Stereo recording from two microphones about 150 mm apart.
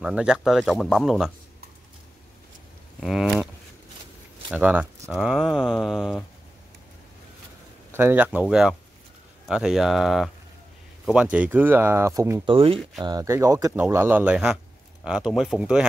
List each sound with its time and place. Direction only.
0.0 s speech: 5° right (ahead or behind)
3.0 s speech: centre (ahead or behind)
4.5 s speech: 10° right (ahead or behind)
7.9 s speech: 15° right (ahead or behind)
12.4 s speech: 35° right (ahead or behind)
13.0 s speech: 25° right (ahead or behind); by 15.9 s 5° right (ahead or behind)